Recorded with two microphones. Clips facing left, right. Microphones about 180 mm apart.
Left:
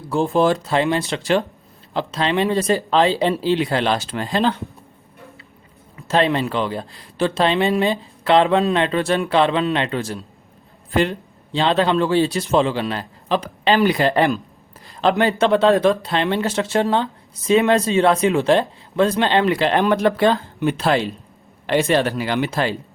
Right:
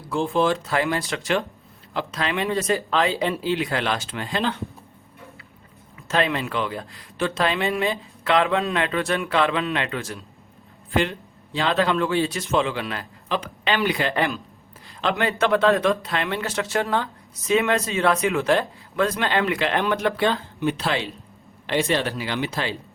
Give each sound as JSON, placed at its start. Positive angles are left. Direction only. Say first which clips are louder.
{"t": 0.1, "sound": "speech", "louder": "left 4 dB", "side_deg": 40}
{"t": 6.1, "sound": "speech", "louder": "left 5 dB", "side_deg": 30}